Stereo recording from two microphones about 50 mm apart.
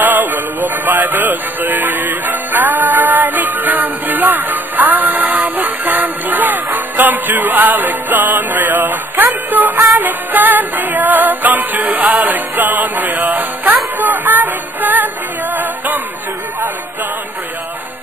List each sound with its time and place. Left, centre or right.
0.0 s music: right